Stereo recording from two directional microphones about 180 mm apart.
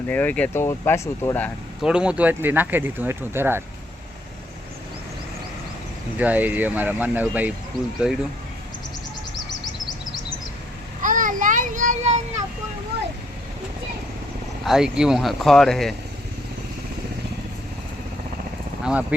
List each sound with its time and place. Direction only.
0.1 s speech: 10° left (ahead or behind)
1.8 s speech: 5° right (ahead or behind)
6.1 s speech: 10° right (ahead or behind)
11.0 s child singing: 45° right (ahead or behind)
12.9 s vehicle: 65° right (ahead or behind)
14.6 s speech: 5° right (ahead or behind)